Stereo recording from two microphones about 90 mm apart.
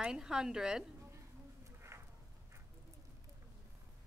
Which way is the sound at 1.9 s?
30° right (ahead or behind).